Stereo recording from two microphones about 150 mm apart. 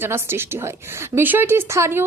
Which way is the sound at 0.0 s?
15° right (ahead or behind).